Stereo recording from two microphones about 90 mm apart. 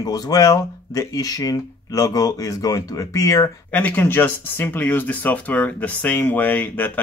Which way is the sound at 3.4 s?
20° left (ahead or behind).